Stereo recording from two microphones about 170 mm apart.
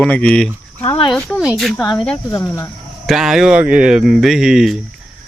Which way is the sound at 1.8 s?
25° left (ahead or behind).